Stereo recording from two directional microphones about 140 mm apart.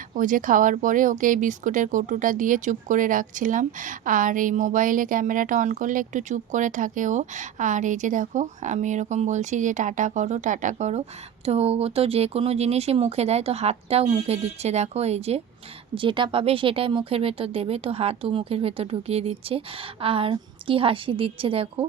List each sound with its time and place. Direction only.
0.1 s speech: 70° right (ahead or behind); by 15.4 s 50° right (ahead or behind)
16.0 s speech: 35° right (ahead or behind)